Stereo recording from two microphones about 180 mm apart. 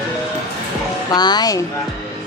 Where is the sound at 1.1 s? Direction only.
25° left (ahead or behind).